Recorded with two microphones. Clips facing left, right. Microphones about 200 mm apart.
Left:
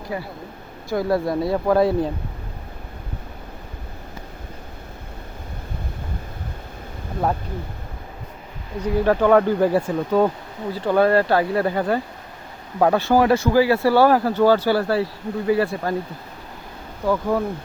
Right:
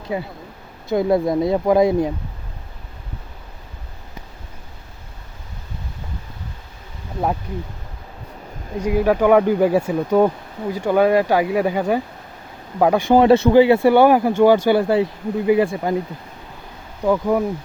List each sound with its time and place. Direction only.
0.1 s speech: 20° right (ahead or behind)
8.8 s speech: 10° right (ahead or behind)
17.1 s speech: 15° right (ahead or behind)